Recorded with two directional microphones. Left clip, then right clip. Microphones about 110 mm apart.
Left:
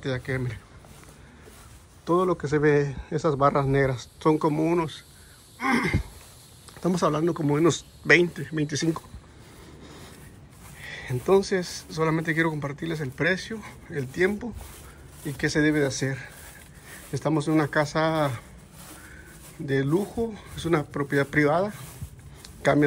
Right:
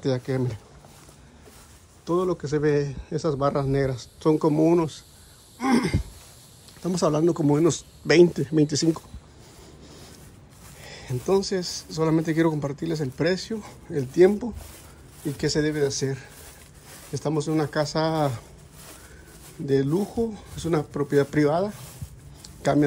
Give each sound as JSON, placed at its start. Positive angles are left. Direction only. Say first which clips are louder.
{"t": 0.0, "sound": "speech", "louder": "right 4 dB", "side_deg": -45}
{"t": 2.0, "sound": "speech", "louder": "left 1 dB", "side_deg": -20}
{"t": 8.3, "sound": "speech", "louder": "right 7 dB", "side_deg": -60}
{"t": 10.8, "sound": "a sound", "louder": "left 3 dB", "side_deg": -35}
{"t": 11.2, "sound": "speech", "louder": "left 2 dB", "side_deg": -30}
{"t": 15.3, "sound": "speech", "louder": "even", "side_deg": -35}
{"t": 15.6, "sound": "speech", "louder": "left 3 dB", "side_deg": -20}
{"t": 19.6, "sound": "speech", "louder": "right 2 dB", "side_deg": -35}
{"t": 22.4, "sound": "a sound", "louder": "left 1 dB", "side_deg": -30}